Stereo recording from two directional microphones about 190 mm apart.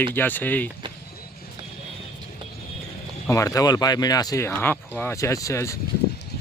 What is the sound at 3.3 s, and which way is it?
Speech, 15° left (ahead or behind).